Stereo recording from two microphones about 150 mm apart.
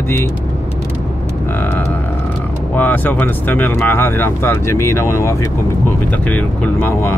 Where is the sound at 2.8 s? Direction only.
10° left (ahead or behind).